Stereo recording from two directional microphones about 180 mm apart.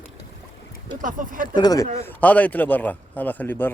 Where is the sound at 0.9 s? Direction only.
45° right (ahead or behind).